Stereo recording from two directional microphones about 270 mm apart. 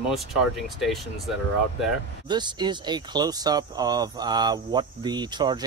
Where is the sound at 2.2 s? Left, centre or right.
Centre.